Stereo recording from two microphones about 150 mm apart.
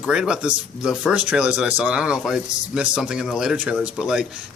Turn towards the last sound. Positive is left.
turn(degrees=-5)  # may be behind; listen again after turning